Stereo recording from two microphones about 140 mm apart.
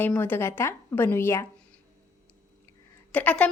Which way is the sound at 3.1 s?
10° left (ahead or behind).